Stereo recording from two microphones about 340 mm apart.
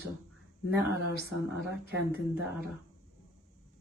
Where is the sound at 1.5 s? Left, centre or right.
Left.